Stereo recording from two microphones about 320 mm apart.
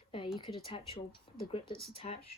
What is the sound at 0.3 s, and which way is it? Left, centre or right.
Speech, centre.